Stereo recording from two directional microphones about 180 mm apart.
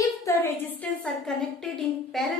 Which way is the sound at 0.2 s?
15° left (ahead or behind).